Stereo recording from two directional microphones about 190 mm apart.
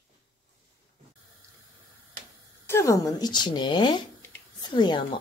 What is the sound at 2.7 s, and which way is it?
Speech, 15° left (ahead or behind).